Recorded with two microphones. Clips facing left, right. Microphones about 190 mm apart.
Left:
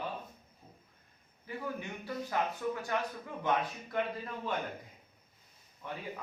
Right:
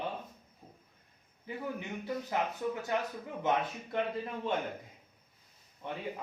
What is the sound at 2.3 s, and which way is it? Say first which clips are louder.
A man's voice: left 1 dB; 20° right (ahead or behind).